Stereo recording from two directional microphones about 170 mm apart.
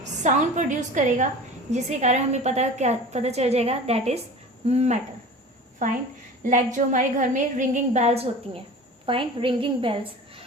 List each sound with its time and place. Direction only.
0.0 s a woman's voice: 45° right (ahead or behind)
5.8 s a woman's voice: 50° right (ahead or behind); by 10.4 s 30° right (ahead or behind)